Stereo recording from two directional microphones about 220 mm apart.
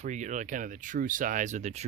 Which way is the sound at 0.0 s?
35° right (ahead or behind).